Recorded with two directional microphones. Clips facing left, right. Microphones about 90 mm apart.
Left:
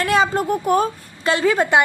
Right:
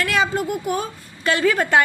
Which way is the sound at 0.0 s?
35° left (ahead or behind).